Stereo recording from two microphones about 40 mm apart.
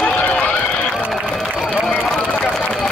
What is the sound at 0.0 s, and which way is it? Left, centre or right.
Run, left.